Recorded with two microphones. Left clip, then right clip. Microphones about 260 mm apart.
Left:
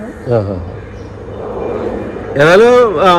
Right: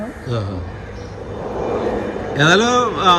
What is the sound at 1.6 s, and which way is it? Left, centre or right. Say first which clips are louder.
Vehicle: left 2 dB; right.